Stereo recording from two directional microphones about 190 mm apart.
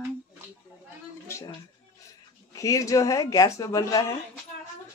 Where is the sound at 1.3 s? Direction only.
15° left (ahead or behind).